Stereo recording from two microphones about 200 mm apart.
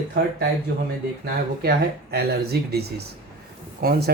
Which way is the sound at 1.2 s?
50° right (ahead or behind).